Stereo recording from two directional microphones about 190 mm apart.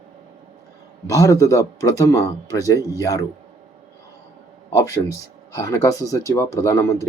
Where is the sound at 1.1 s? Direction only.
15° left (ahead or behind).